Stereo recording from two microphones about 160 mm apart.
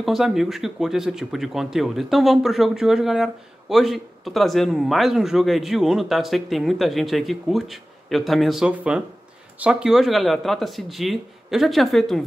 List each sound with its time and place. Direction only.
0.0 s speech: centre (ahead or behind)